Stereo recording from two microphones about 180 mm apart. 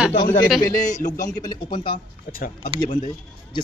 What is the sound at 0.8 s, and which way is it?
Speech, 45° left (ahead or behind).